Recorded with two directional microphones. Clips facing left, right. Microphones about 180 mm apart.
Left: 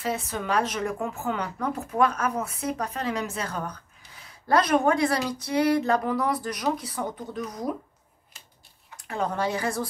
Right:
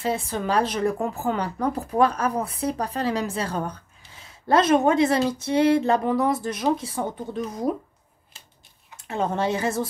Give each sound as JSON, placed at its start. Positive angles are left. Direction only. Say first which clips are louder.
{"t": 0.0, "sound": "speech", "louder": "right 4 dB", "side_deg": -30}
{"t": 8.3, "sound": "a sound", "louder": "right 1 dB", "side_deg": -30}
{"t": 8.9, "sound": "speech", "louder": "right 3 dB", "side_deg": -25}